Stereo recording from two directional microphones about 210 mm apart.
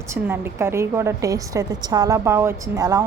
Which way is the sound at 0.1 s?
10° right (ahead or behind).